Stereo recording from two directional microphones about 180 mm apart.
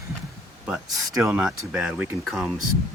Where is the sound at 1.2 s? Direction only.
5° right (ahead or behind).